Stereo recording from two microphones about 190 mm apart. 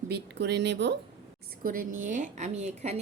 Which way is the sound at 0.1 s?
60° right (ahead or behind).